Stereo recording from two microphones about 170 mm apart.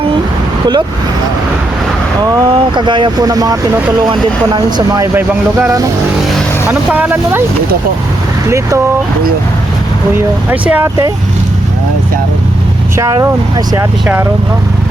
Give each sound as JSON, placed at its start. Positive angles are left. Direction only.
{"t": 2.3, "sound": "speech", "side_deg": -25}
{"t": 5.1, "sound": "speech", "side_deg": -5}
{"t": 8.4, "sound": "speech", "side_deg": -15}
{"t": 10.5, "sound": "speech", "side_deg": -10}
{"t": 13.0, "sound": "speech", "side_deg": -20}